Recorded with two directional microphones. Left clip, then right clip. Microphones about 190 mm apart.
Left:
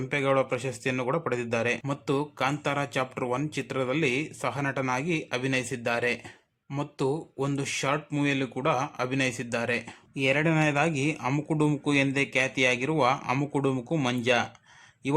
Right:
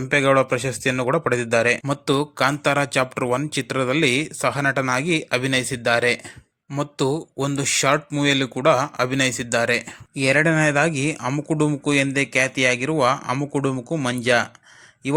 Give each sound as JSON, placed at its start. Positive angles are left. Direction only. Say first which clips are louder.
{"t": 0.1, "sound": "speech", "louder": "right 8 dB", "side_deg": -20}
{"t": 11.2, "sound": "speech", "louder": "right 4 dB", "side_deg": -10}
{"t": 11.4, "sound": "speech", "louder": "right 7 dB", "side_deg": -20}
{"t": 13.3, "sound": "speech", "louder": "right 4 dB", "side_deg": -5}
{"t": 13.6, "sound": "speech", "louder": "right 4 dB", "side_deg": -20}